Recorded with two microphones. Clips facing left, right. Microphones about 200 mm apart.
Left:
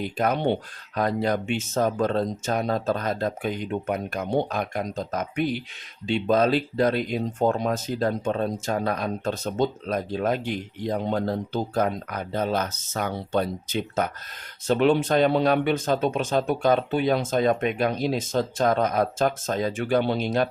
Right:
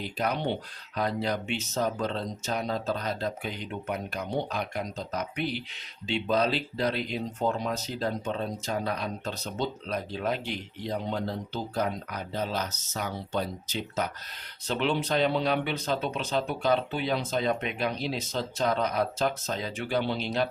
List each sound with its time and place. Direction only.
0.0 s speech: 50° left (ahead or behind)